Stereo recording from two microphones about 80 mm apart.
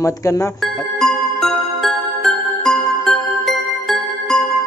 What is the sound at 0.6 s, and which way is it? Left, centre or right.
Music, centre.